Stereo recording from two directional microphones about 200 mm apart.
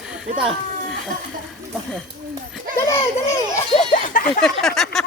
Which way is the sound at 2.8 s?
15° left (ahead or behind).